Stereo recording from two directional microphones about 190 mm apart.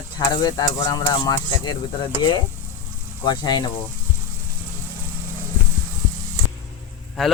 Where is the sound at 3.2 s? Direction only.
20° left (ahead or behind).